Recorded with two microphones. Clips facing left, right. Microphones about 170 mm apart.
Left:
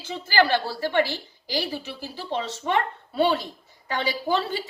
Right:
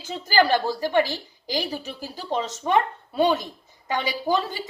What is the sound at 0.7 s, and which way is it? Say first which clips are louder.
Speech: right 2 dB; 15° right (ahead or behind).